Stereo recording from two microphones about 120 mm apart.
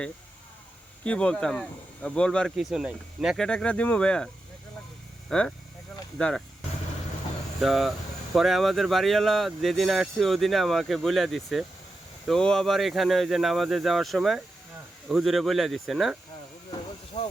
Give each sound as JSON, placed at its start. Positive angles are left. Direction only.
{"t": 1.0, "sound": "speech", "side_deg": 10}
{"t": 2.6, "sound": "speech", "side_deg": -5}
{"t": 3.3, "sound": "speech", "side_deg": 5}
{"t": 5.3, "sound": "speech", "side_deg": 5}
{"t": 7.6, "sound": "speech", "side_deg": 0}
{"t": 17.2, "sound": "vehicle", "side_deg": 60}